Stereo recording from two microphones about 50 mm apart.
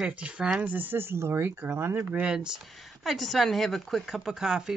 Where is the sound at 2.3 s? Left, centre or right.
Centre.